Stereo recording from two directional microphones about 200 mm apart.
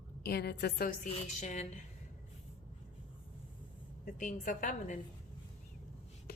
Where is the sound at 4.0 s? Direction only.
40° left (ahead or behind).